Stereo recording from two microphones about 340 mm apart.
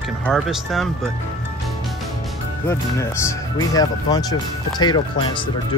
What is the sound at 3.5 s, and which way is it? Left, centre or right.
Speech, centre.